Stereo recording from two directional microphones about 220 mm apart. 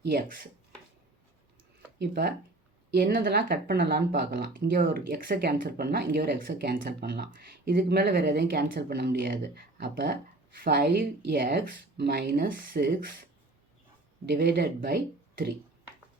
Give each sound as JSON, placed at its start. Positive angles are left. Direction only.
{"t": 0.0, "sound": "speech", "side_deg": -50}
{"t": 2.0, "sound": "speech", "side_deg": -45}
{"t": 14.3, "sound": "speech", "side_deg": -45}